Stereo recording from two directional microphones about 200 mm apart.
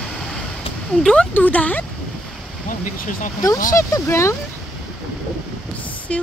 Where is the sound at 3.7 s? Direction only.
15° left (ahead or behind).